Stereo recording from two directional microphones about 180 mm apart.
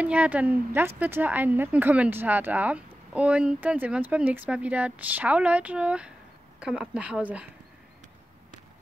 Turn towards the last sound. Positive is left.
turn(degrees=-5)  # may be behind; listen again after turning